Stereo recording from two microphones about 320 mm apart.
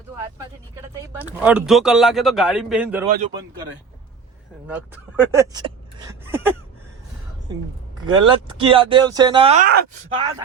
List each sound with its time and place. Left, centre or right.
1.0 s a man's voice: centre
5.3 s speech: centre
8.1 s speech: centre